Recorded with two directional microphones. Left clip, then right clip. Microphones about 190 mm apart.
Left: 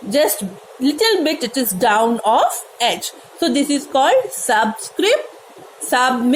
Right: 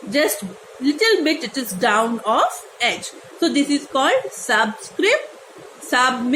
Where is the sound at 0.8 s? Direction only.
30° left (ahead or behind).